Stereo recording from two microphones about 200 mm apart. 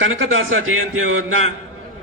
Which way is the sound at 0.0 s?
80° right.